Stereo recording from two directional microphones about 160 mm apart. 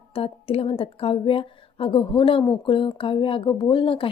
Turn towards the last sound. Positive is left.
turn(degrees=35)  # may be behind; listen again after turning